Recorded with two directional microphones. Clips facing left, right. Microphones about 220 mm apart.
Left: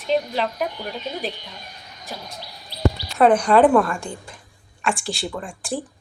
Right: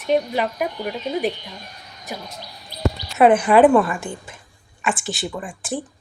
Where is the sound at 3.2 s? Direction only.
5° right (ahead or behind).